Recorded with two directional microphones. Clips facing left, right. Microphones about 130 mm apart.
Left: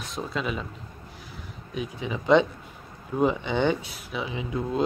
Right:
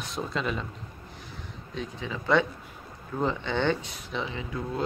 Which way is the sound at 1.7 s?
15° left (ahead or behind).